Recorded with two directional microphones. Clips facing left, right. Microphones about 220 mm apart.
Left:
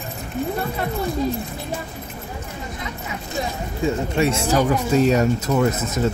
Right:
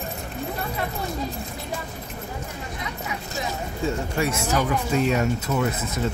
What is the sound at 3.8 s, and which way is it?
Speech, 25° left (ahead or behind).